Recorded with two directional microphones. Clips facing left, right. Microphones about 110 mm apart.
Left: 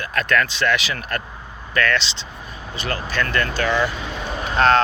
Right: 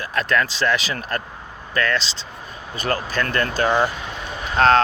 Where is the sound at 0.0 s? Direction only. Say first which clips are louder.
Even; 30° right (ahead or behind).